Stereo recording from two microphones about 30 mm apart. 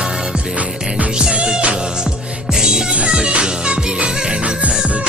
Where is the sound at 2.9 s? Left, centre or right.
Right.